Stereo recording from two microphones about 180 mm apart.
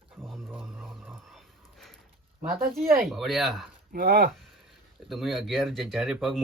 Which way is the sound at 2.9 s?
Centre (ahead or behind).